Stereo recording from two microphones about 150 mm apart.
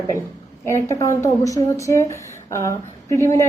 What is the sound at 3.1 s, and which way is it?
Speech, 20° left (ahead or behind).